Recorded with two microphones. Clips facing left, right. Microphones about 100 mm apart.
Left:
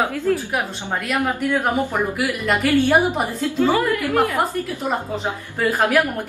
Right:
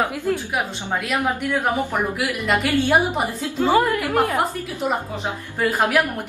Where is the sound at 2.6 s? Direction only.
15° right (ahead or behind).